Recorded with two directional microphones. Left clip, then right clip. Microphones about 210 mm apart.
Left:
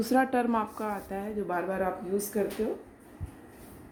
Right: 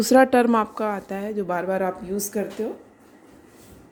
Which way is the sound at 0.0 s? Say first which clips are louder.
Right 10 dB; 40° right (ahead or behind).